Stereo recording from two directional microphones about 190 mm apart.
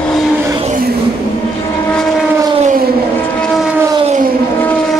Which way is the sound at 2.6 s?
45° right (ahead or behind).